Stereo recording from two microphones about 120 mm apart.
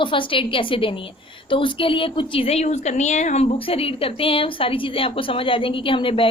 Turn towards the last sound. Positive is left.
turn(degrees=45)  # may be behind; listen again after turning